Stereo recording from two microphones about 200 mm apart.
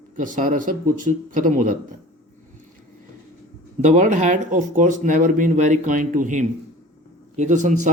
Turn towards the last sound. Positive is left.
turn(degrees=-40)  # may be behind; listen again after turning